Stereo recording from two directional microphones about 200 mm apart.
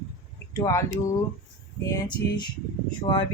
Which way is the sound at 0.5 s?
15° left (ahead or behind).